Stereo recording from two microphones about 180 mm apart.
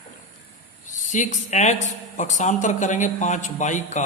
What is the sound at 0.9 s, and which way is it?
Speech, 45° left (ahead or behind).